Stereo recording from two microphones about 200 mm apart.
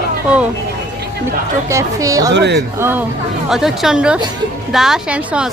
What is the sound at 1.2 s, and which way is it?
A woman's voice, 15° right (ahead or behind).